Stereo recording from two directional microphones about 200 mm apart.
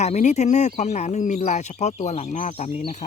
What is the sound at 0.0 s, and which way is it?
Speech, 35° left (ahead or behind).